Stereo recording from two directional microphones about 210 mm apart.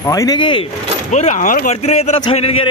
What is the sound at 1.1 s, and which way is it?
Speech, 35° left (ahead or behind).